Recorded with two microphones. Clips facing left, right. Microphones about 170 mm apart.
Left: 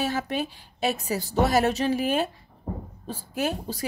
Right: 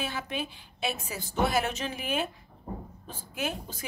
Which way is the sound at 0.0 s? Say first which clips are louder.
Left 7 dB; 40° left (ahead or behind).